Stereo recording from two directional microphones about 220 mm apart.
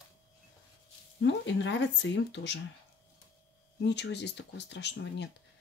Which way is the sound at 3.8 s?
50° left (ahead or behind).